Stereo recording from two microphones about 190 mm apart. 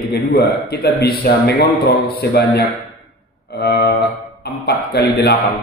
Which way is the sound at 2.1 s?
55° left (ahead or behind).